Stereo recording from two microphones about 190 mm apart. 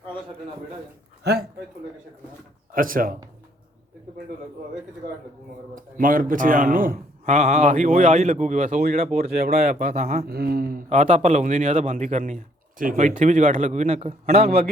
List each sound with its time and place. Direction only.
1.2 s a man's voice: 60° right (ahead or behind)
2.7 s a man's voice: 45° right (ahead or behind)
5.7 s a man's voice: 45° right (ahead or behind)
10.2 s a man's voice: 55° right (ahead or behind); by 14.4 s 35° right (ahead or behind)